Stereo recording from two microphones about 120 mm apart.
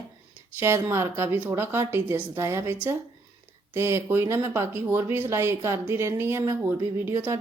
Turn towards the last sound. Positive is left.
turn(degrees=-20)  # may be behind; listen again after turning